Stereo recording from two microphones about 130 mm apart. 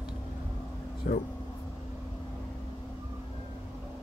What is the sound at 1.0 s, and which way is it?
Vehicle, 90° left.